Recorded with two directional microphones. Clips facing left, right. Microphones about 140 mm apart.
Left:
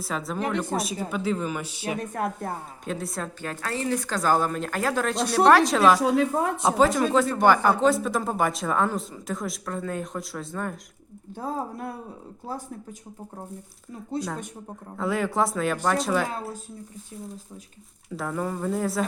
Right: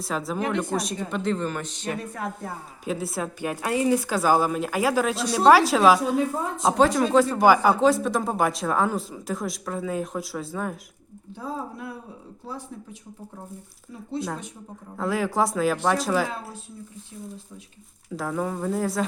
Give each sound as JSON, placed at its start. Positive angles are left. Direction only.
{"t": 0.0, "sound": "a man's voice", "side_deg": 0}
{"t": 2.0, "sound": "a woman's voice", "side_deg": 50}
{"t": 2.8, "sound": "speech", "side_deg": -5}
{"t": 3.4, "sound": "speech", "side_deg": -15}
{"t": 6.0, "sound": "a woman's voice", "side_deg": 80}
{"t": 6.6, "sound": "speech", "side_deg": 0}
{"t": 11.3, "sound": "a woman's voice", "side_deg": 45}
{"t": 14.9, "sound": "speech", "side_deg": 0}
{"t": 18.1, "sound": "speech", "side_deg": 0}